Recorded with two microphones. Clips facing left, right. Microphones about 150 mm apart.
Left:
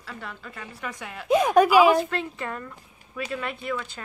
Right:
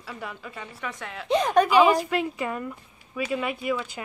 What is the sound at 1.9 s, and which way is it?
Speech, 10° right (ahead or behind).